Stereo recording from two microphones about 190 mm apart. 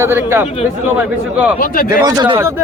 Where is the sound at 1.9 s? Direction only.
20° right (ahead or behind).